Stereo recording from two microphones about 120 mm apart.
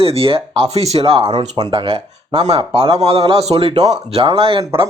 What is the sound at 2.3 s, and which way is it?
Speech, 55° right (ahead or behind).